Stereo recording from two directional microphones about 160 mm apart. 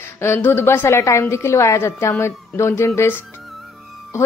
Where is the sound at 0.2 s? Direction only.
15° left (ahead or behind).